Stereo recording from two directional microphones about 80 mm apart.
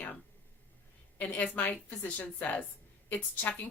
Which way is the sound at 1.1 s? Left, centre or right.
Left.